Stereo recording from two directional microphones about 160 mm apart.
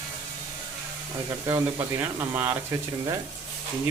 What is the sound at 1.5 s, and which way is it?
Speech, 20° right (ahead or behind).